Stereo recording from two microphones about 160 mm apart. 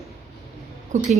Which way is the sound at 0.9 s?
50° right (ahead or behind).